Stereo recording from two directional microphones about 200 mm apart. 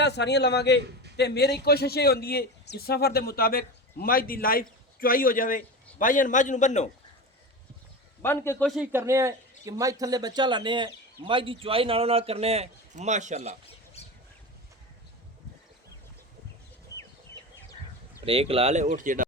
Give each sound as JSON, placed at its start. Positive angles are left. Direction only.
{"t": 0.0, "sound": "a man's voice", "side_deg": 55}
{"t": 8.2, "sound": "a man's voice", "side_deg": 10}
{"t": 8.6, "sound": "speech", "side_deg": 0}
{"t": 8.9, "sound": "speech", "side_deg": -15}
{"t": 18.3, "sound": "speech", "side_deg": -30}